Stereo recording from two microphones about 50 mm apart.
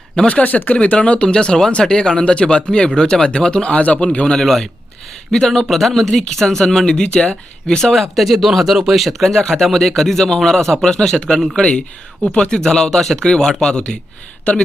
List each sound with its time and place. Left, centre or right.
0.3 s speech: left
4.4 s speech: centre
8.1 s speech: centre